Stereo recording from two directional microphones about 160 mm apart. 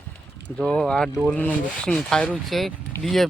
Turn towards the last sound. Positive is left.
turn(degrees=0)  # may be behind; listen again after turning